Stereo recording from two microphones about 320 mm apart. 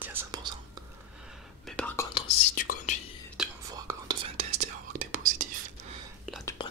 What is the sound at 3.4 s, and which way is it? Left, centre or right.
Whispering, centre.